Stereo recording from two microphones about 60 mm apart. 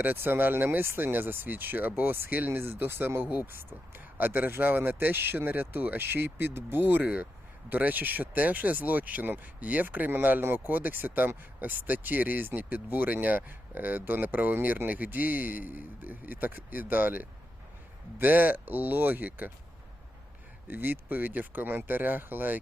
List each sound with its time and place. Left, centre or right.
0.0 s speech: right
20.7 s speech: right